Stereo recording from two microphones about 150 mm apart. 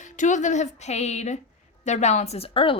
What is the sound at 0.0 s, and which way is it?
A woman's voice, 55° left (ahead or behind).